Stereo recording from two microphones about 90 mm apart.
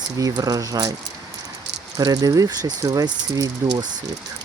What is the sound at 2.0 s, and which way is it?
Speech, 45° right (ahead or behind).